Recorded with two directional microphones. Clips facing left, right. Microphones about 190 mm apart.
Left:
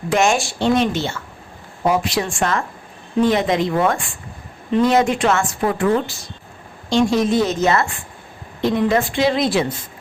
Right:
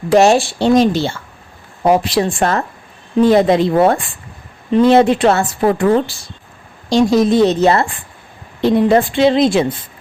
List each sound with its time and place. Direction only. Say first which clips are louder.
0.1 s a woman's voice: right 7 dB; 35° right (ahead or behind)